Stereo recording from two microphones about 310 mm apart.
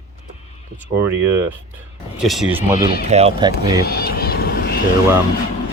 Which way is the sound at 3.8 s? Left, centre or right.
Left.